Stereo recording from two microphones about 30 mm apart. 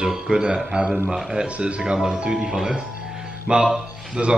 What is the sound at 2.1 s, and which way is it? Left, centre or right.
Speech, right.